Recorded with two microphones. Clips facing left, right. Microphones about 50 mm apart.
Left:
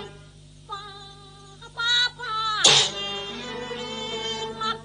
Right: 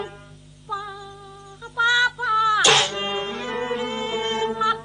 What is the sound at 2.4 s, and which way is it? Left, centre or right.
Music, right.